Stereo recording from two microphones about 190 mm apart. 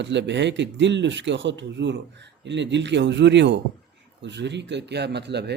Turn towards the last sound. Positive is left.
turn(degrees=-60)  # may be behind; listen again after turning